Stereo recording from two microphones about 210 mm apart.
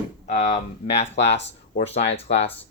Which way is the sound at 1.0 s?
55° left (ahead or behind).